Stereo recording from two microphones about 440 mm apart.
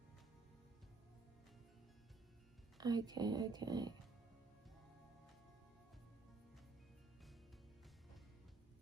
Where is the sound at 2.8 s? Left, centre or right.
Centre.